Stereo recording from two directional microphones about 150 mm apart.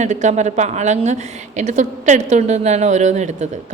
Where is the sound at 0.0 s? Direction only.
50° right (ahead or behind).